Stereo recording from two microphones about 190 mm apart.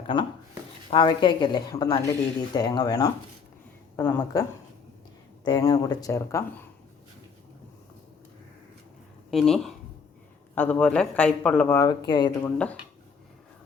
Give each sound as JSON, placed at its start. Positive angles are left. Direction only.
{"t": 0.1, "sound": "a woman's voice", "side_deg": 25}
{"t": 3.9, "sound": "speech", "side_deg": 10}
{"t": 5.5, "sound": "speech", "side_deg": 20}
{"t": 9.3, "sound": "speech", "side_deg": 0}
{"t": 12.5, "sound": "speech", "side_deg": 5}